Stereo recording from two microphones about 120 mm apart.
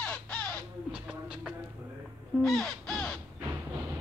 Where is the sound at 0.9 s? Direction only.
5° right (ahead or behind).